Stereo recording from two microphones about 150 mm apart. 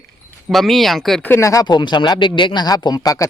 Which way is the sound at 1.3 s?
20° left (ahead or behind).